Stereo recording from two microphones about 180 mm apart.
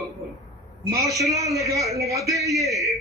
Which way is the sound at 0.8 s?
20° right (ahead or behind).